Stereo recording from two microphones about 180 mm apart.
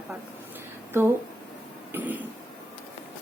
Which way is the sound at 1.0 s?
15° right (ahead or behind).